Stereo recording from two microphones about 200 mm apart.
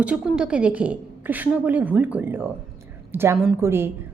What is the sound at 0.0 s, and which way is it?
A woman's voice, 5° right (ahead or behind).